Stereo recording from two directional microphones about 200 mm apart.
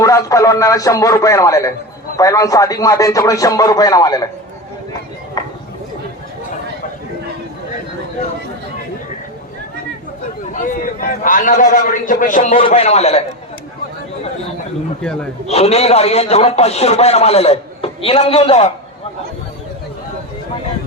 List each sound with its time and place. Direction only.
0.0 s speech: 15° left (ahead or behind)
10.5 s a man's voice: 40° left (ahead or behind)
15.4 s a man's voice: 30° left (ahead or behind)